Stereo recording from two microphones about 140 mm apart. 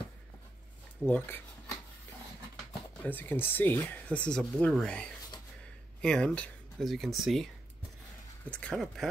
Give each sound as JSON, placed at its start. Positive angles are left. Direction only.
{"t": 1.0, "sound": "speech", "side_deg": 15}
{"t": 3.1, "sound": "speech", "side_deg": 15}
{"t": 8.5, "sound": "speech", "side_deg": 10}